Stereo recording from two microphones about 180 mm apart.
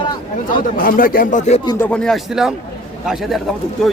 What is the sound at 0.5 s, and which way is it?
Speech, 50° left (ahead or behind).